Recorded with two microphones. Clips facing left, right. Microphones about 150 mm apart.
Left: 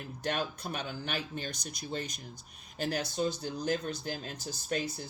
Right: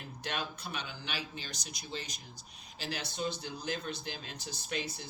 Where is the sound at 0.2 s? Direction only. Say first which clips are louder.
Left 5 dB; 45° left (ahead or behind).